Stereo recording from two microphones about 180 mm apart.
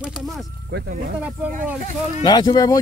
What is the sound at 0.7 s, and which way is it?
Speech, 70° right (ahead or behind).